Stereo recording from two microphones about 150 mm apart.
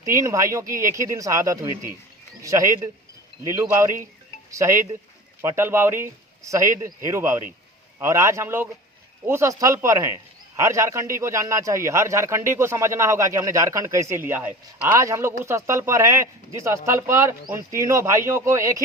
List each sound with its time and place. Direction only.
0.0 s a man's voice: 20° right (ahead or behind)